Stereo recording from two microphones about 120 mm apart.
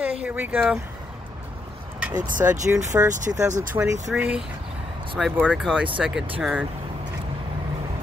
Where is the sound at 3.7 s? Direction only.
35° right (ahead or behind).